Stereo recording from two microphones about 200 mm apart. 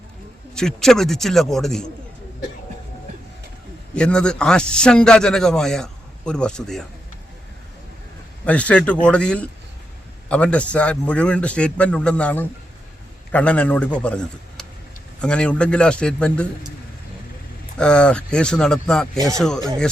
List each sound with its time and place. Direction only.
0.5 s a man's voice: 5° left (ahead or behind)
3.9 s a man's voice: 5° left (ahead or behind)
8.4 s a man's voice: 5° left (ahead or behind)
17.7 s a man's voice: 5° left (ahead or behind)